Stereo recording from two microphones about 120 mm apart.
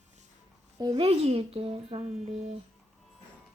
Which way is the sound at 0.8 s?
35° right (ahead or behind).